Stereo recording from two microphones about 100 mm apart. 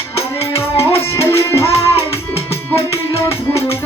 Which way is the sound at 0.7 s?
25° left (ahead or behind).